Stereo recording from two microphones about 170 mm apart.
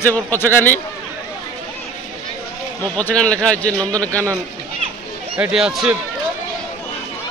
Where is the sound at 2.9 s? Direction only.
5° left (ahead or behind).